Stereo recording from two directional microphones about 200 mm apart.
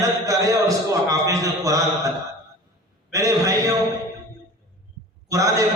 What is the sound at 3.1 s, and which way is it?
Speech, 15° right (ahead or behind).